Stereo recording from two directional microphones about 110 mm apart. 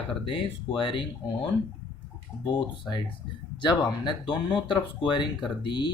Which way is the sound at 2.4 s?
50° left (ahead or behind).